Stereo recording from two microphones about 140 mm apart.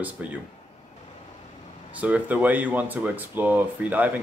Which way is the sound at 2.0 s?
10° right (ahead or behind).